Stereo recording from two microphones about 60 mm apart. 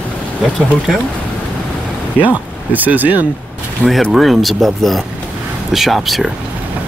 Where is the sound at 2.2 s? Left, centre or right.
Right.